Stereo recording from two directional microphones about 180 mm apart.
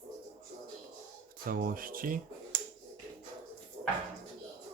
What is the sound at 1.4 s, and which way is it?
Speech, 50° right (ahead or behind).